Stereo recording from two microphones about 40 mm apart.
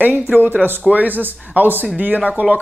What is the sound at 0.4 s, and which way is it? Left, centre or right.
Speech, right.